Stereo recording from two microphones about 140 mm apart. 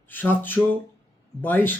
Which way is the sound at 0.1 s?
15° left (ahead or behind).